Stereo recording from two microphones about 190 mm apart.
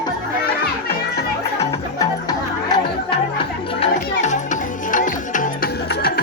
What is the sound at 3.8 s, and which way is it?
Music, 40° left (ahead or behind).